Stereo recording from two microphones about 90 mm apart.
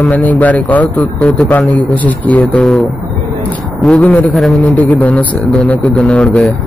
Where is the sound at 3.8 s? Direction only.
15° left (ahead or behind).